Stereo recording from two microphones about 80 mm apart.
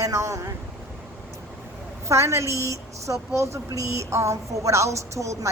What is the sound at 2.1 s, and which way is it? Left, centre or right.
Speech, right.